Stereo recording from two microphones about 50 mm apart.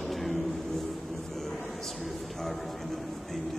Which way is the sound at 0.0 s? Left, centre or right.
Centre.